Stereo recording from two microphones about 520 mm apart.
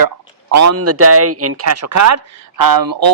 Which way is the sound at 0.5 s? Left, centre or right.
Right.